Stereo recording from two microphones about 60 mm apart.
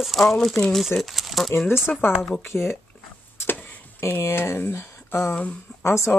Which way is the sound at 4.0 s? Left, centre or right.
Left.